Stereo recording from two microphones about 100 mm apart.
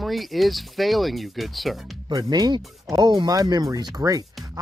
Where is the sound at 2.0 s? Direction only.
45° right (ahead or behind).